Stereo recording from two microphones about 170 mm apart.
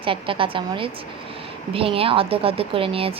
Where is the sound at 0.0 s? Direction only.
30° right (ahead or behind).